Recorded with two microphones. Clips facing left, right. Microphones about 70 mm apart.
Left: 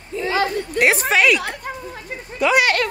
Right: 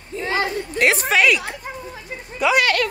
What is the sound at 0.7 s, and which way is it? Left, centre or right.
Speech, centre.